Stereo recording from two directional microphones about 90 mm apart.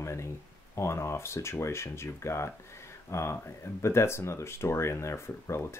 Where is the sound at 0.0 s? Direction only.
30° left (ahead or behind).